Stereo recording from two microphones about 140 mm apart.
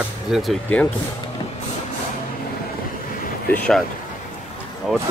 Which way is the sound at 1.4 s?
35° left (ahead or behind).